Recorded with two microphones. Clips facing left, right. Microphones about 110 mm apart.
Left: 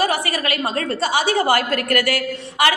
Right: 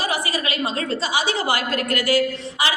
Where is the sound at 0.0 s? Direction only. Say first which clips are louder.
Left 4 dB; 55° left (ahead or behind).